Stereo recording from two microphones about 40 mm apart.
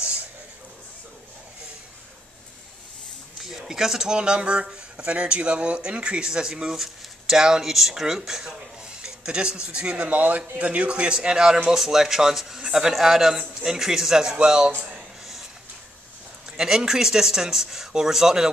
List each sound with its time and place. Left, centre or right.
3.3 s a sound: centre
4.2 s speech: right
6.7 s speech: centre
10.0 s a man's voice: right
10.6 s a man's voice: right
15.0 s a sound: centre
16.5 s a man's voice: centre